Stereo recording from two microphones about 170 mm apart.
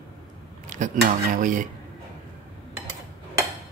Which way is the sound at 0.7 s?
45° right (ahead or behind).